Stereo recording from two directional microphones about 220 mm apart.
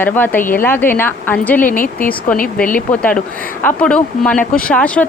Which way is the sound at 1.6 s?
40° left (ahead or behind).